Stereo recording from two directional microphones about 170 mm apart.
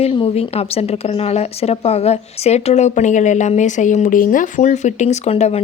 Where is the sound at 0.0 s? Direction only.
35° left (ahead or behind).